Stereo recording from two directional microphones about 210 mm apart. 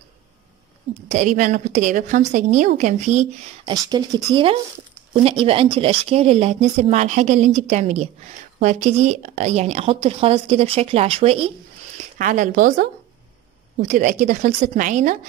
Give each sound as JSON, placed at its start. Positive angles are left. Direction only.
{"t": 1.0, "sound": "a woman's voice", "side_deg": -35}
{"t": 3.6, "sound": "a woman's voice", "side_deg": -20}
{"t": 13.8, "sound": "a woman's voice", "side_deg": -35}